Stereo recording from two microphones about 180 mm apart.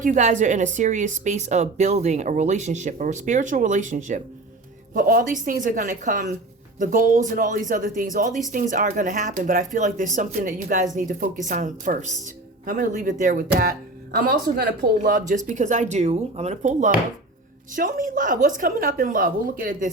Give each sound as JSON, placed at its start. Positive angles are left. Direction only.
{"t": 0.0, "sound": "a woman's voice", "side_deg": -45}
{"t": 14.9, "sound": "a woman's voice", "side_deg": -50}